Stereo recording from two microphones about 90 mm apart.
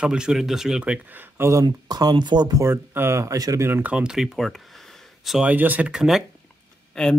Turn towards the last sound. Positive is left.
turn(degrees=5)  # may be behind; listen again after turning